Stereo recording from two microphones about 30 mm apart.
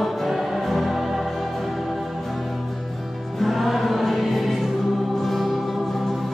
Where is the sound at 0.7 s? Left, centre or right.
Centre.